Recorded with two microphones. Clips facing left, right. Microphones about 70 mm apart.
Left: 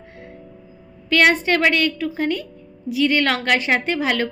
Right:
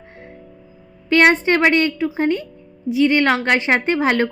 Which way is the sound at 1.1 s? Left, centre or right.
Right.